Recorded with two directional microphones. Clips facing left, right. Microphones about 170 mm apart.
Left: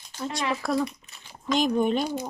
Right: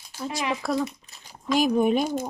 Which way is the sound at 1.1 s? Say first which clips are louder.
Even; 40° right (ahead or behind).